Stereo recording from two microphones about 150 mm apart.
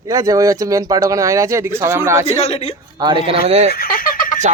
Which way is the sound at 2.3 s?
40° left (ahead or behind).